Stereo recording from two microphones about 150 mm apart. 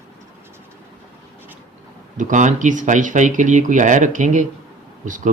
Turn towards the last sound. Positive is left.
turn(degrees=-55)  # may be behind; listen again after turning